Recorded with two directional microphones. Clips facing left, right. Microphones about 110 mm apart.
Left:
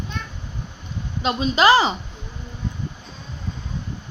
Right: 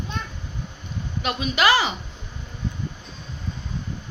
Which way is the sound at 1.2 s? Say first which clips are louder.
Left 4 dB; 30° left (ahead or behind).